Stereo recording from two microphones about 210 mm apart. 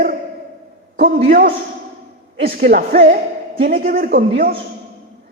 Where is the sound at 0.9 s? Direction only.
45° right (ahead or behind).